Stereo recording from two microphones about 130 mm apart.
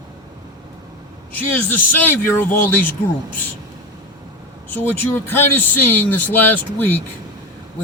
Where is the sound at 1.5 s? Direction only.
15° left (ahead or behind).